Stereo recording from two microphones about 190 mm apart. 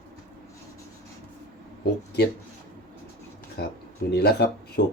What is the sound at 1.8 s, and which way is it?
Speech, 55° left (ahead or behind).